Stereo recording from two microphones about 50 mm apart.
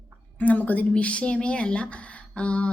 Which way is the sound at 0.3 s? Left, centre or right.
Left.